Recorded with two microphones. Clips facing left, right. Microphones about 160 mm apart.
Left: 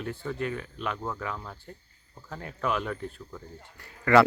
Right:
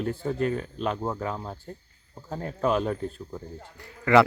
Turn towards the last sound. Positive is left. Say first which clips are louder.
# right 1 dB
turn(degrees=-15)  # may be behind; listen again after turning